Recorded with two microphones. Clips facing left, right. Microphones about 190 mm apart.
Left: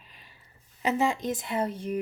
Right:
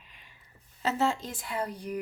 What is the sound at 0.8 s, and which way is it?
A woman's voice, 15° left (ahead or behind).